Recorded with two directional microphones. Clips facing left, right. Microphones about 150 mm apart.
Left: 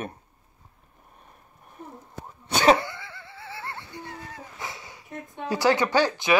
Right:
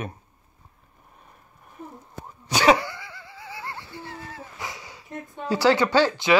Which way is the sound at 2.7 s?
25° left (ahead or behind).